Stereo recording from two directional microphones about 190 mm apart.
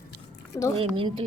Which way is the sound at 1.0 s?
30° right (ahead or behind).